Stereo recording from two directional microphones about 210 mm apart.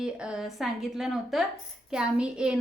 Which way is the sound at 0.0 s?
5° right (ahead or behind).